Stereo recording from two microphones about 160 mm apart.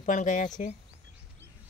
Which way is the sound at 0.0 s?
50° left (ahead or behind).